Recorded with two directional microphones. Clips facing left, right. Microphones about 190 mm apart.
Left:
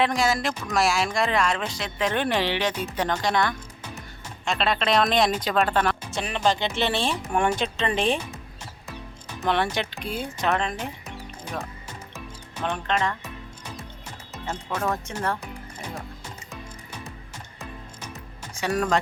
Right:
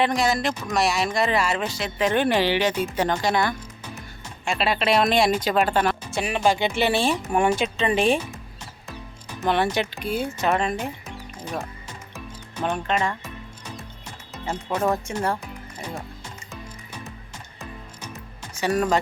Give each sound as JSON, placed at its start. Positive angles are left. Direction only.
{"t": 0.0, "sound": "speech", "side_deg": 0}
{"t": 9.4, "sound": "speech", "side_deg": -5}
{"t": 12.6, "sound": "speech", "side_deg": -10}
{"t": 14.4, "sound": "speech", "side_deg": -10}
{"t": 18.6, "sound": "speech", "side_deg": -5}